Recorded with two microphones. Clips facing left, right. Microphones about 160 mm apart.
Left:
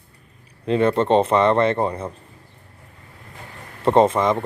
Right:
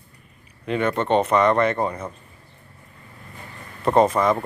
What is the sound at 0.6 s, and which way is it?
A man's voice, 30° left (ahead or behind).